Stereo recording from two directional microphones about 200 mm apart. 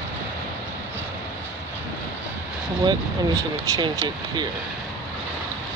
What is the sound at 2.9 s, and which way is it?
Speech, 20° right (ahead or behind).